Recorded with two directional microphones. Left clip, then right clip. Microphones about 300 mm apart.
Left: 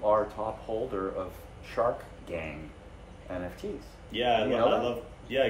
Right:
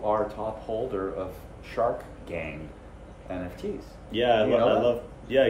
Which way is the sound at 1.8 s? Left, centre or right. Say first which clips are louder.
Right 2 dB; centre.